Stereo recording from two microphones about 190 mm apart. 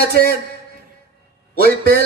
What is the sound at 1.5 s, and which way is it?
Speech, 50° right (ahead or behind).